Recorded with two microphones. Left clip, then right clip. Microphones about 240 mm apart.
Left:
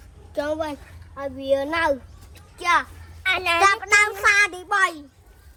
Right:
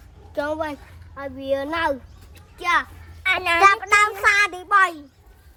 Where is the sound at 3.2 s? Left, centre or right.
Right.